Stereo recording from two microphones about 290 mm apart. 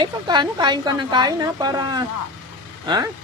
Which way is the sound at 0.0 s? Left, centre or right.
Centre.